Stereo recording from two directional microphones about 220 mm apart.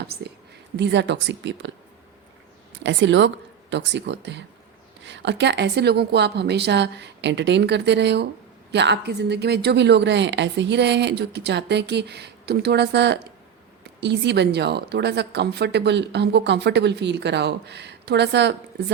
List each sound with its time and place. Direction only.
0.0 s a woman's voice: 50° right (ahead or behind)
2.8 s a woman's voice: 55° right (ahead or behind)